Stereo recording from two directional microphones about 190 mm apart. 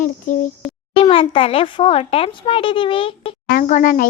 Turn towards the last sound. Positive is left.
turn(degrees=45)  # may be behind; listen again after turning